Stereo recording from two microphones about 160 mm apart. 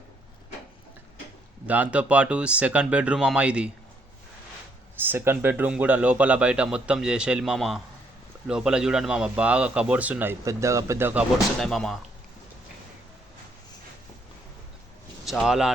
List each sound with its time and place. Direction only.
1.6 s a man's voice: 10° right (ahead or behind)
4.9 s a man's voice: 15° right (ahead or behind)
11.6 s speech: centre (ahead or behind)
15.2 s speech: 5° right (ahead or behind)